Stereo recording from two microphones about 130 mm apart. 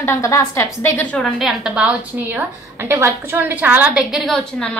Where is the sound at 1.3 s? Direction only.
5° right (ahead or behind).